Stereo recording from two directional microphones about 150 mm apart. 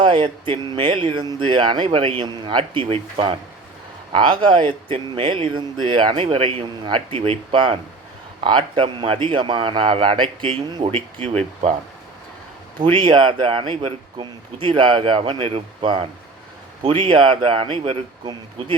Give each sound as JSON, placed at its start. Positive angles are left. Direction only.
{"t": 0.0, "sound": "speech", "side_deg": -30}
{"t": 12.8, "sound": "speech", "side_deg": -35}